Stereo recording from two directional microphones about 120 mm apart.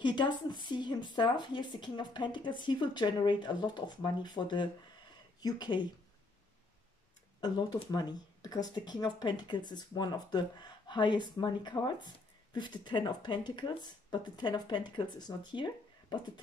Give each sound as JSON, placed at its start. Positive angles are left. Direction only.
{"t": 0.0, "sound": "speech", "side_deg": 40}
{"t": 7.3, "sound": "speech", "side_deg": 35}